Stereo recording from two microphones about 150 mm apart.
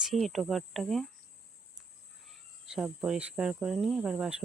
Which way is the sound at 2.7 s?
5° right (ahead or behind).